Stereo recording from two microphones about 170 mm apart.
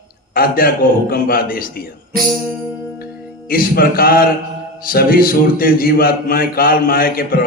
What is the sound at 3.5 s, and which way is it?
A man's voice, 60° left (ahead or behind).